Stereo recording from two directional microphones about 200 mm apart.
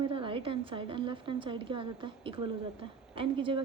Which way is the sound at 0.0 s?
25° right (ahead or behind).